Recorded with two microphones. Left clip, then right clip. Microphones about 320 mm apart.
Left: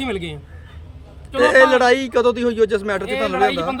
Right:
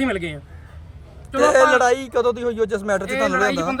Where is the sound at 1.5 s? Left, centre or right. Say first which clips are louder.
Left 2 dB; right.